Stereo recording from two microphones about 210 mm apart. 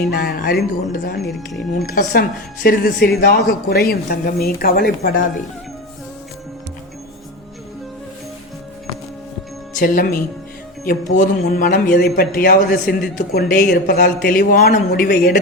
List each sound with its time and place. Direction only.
0.1 s a woman's voice: 45° left (ahead or behind)
9.7 s a woman's voice: 40° left (ahead or behind)